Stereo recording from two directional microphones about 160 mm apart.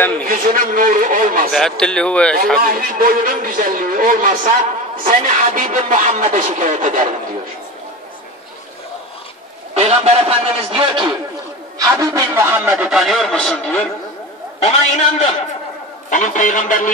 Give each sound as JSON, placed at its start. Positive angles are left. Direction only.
{"t": 0.2, "sound": "a man's voice", "side_deg": -60}
{"t": 1.5, "sound": "a man's voice", "side_deg": 5}
{"t": 2.6, "sound": "a man's voice", "side_deg": -60}
{"t": 9.8, "sound": "a man's voice", "side_deg": -40}
{"t": 11.9, "sound": "a man's voice", "side_deg": -20}
{"t": 14.6, "sound": "a man's voice", "side_deg": 40}
{"t": 16.1, "sound": "speech", "side_deg": 55}